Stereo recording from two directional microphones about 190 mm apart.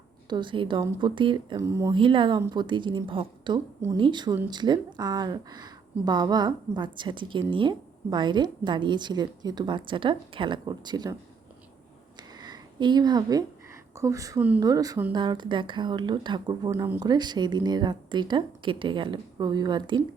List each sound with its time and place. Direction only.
0.3 s a woman's voice: 25° right (ahead or behind)
2.0 s a woman's voice: 25° right (ahead or behind)
12.4 s a sound: 20° right (ahead or behind)
13.9 s speech: 15° right (ahead or behind)
14.6 s a woman's voice: 20° right (ahead or behind)
16.7 s speech: 10° right (ahead or behind)
17.0 s a woman's voice: 20° right (ahead or behind)